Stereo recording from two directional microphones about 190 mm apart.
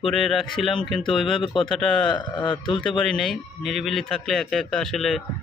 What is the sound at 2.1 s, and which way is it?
Speech, 25° left (ahead or behind).